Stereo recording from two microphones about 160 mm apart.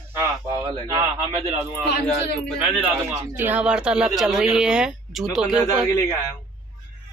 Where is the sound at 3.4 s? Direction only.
5° right (ahead or behind).